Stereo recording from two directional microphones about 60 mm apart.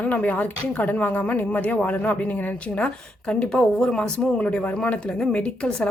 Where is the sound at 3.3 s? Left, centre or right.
Centre.